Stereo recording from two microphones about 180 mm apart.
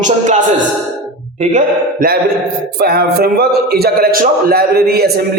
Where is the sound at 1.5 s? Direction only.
50° right (ahead or behind).